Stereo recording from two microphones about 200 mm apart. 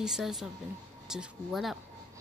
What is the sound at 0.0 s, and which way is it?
A woman's voice, centre (ahead or behind).